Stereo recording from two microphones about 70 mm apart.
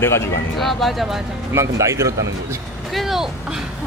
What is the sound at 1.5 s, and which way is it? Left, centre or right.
Speech, right.